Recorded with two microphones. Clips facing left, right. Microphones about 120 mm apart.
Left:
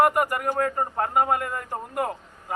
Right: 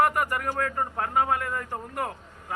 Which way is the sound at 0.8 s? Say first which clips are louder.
Left 3 dB; 35° left (ahead or behind).